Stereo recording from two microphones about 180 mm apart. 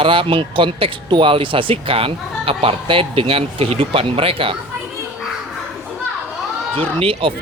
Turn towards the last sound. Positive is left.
turn(degrees=-30)  # may be behind; listen again after turning